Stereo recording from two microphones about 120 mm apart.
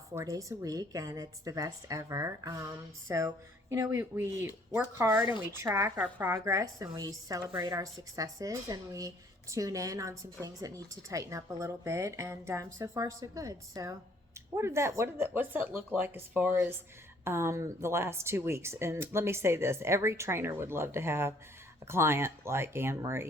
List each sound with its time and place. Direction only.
0.1 s speech: 25° right (ahead or behind)